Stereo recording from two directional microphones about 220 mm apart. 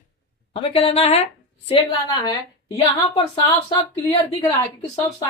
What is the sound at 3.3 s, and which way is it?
A woman's voice, 25° left (ahead or behind).